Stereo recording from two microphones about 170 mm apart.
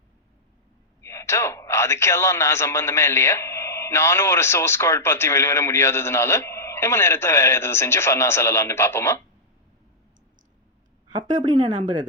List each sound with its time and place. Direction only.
1.0 s a man's voice: 15° left (ahead or behind)
11.4 s a woman's voice: 25° right (ahead or behind)